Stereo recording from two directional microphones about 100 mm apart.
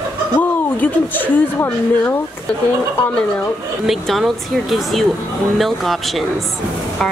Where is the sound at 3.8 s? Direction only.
Centre (ahead or behind).